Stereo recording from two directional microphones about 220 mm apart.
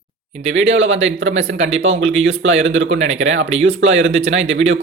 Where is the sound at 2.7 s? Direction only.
60° right (ahead or behind).